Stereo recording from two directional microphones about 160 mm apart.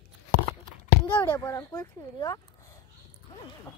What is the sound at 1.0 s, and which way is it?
Speech, 10° left (ahead or behind).